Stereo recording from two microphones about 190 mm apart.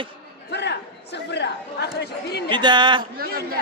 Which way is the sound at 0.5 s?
65° left (ahead or behind).